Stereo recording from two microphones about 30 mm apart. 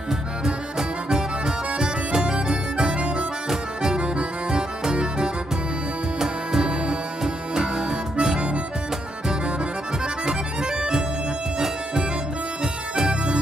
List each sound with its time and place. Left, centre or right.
0.5 s music: centre
3.9 s music: right; by 6.7 s centre
7.5 s harmonica: right
10.2 s accordion: right
12.9 s music: right